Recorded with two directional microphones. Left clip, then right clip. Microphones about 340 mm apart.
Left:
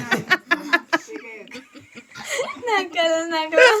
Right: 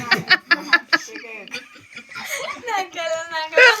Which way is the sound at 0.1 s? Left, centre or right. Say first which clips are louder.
Right 3 dB; centre.